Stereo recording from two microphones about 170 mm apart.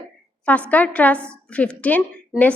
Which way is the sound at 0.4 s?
10° left (ahead or behind).